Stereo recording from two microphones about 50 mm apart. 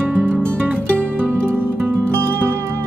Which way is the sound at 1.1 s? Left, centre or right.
Right.